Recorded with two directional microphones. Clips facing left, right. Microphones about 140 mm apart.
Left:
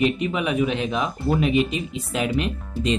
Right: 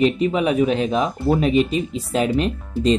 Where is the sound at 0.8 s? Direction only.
25° right (ahead or behind).